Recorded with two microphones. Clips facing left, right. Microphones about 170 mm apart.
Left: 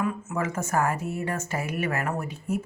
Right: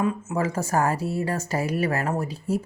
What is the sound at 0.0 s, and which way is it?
Speech, 35° right (ahead or behind).